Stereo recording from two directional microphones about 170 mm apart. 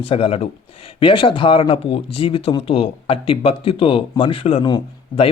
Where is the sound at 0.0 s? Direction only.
35° left (ahead or behind).